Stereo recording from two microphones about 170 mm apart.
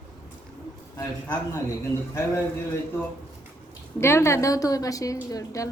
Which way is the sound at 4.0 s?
15° left (ahead or behind).